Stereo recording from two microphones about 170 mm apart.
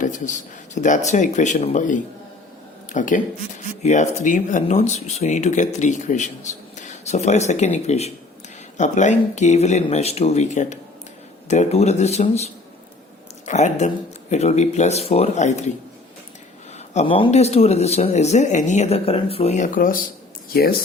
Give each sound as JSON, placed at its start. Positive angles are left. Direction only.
{"t": 0.0, "sound": "speech", "side_deg": 50}
{"t": 16.7, "sound": "speech", "side_deg": 40}